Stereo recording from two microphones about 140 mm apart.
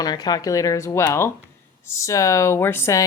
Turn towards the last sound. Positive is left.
turn(degrees=20)  # may be behind; listen again after turning